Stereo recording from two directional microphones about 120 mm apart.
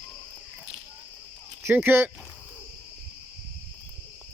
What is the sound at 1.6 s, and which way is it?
Speech, 15° right (ahead or behind).